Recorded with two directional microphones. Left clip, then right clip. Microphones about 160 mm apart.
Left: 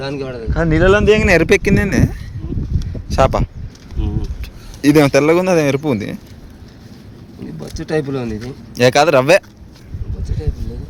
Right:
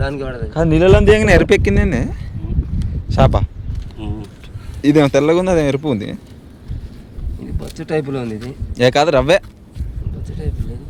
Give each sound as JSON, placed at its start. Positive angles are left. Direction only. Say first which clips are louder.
{"t": 0.0, "sound": "speech", "louder": "even", "side_deg": 0}
{"t": 0.8, "sound": "speech", "louder": "right 1 dB", "side_deg": -25}
{"t": 4.0, "sound": "a sound", "louder": "left 2 dB", "side_deg": -35}
{"t": 4.8, "sound": "speech", "louder": "left 1 dB", "side_deg": 0}
{"t": 7.4, "sound": "speech", "louder": "left 1 dB", "side_deg": 0}